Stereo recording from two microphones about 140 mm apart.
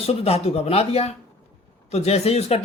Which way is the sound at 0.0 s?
45° left (ahead or behind).